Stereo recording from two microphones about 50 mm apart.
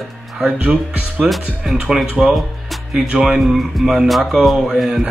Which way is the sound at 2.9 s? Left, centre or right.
Centre.